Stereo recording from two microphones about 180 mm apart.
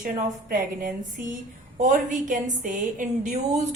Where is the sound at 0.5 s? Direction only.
50° right (ahead or behind).